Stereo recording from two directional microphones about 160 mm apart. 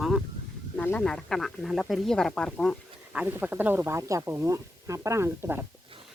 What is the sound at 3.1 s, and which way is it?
Speech, 10° right (ahead or behind).